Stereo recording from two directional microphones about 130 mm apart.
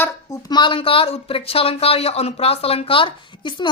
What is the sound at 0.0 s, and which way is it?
Speech, 25° left (ahead or behind).